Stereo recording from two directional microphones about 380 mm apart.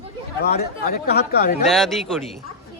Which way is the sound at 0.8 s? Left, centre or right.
Left.